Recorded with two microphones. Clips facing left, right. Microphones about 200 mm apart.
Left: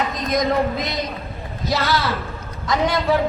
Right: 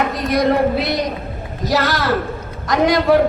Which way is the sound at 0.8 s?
10° right (ahead or behind).